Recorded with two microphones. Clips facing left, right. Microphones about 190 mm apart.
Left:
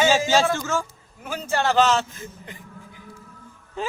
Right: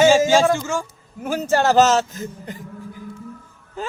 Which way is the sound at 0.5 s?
15° right (ahead or behind).